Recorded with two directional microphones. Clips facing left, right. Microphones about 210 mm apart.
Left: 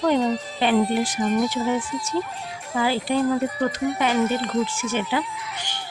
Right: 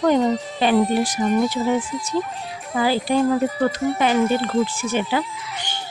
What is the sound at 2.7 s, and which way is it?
Speech, 40° right (ahead or behind).